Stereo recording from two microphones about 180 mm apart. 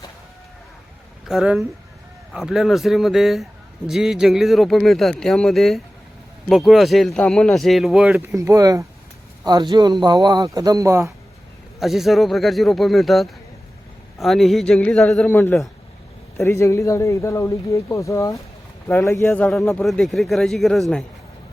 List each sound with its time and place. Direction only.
1.3 s speech: centre (ahead or behind)
11.8 s speech: centre (ahead or behind)